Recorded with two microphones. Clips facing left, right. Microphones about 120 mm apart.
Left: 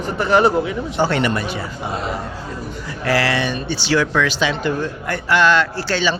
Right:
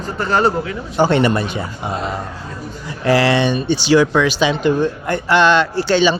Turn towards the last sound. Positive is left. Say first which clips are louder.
# right 6 dB
turn(degrees=-15)  # may be behind; listen again after turning